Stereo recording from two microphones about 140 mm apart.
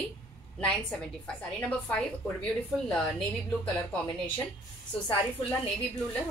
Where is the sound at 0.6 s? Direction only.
5° left (ahead or behind).